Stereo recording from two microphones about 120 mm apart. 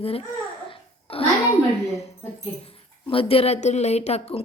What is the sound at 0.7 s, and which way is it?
Babbling, 50° left (ahead or behind).